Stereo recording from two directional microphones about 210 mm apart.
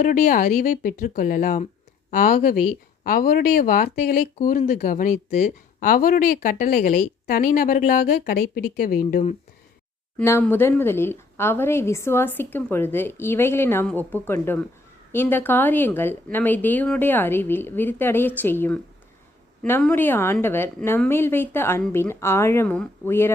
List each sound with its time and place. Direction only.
0.0 s speech: 40° left (ahead or behind)
10.2 s a woman's voice: 10° left (ahead or behind)